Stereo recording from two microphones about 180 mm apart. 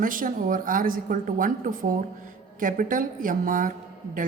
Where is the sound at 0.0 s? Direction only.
50° right (ahead or behind).